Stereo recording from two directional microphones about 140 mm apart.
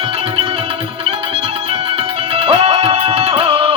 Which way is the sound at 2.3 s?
45° right (ahead or behind).